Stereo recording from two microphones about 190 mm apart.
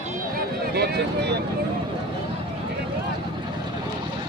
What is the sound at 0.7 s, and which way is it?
Speech, 60° right (ahead or behind).